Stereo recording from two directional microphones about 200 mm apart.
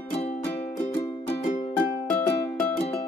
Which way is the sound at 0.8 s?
35° left (ahead or behind).